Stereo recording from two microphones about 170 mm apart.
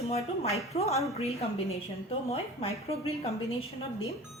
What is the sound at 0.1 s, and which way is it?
A woman's voice, 40° left (ahead or behind).